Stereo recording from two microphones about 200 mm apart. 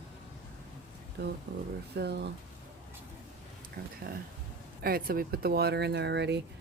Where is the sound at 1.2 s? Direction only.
55° right (ahead or behind).